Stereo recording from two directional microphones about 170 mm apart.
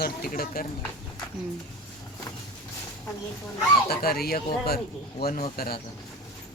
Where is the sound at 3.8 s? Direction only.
65° left (ahead or behind).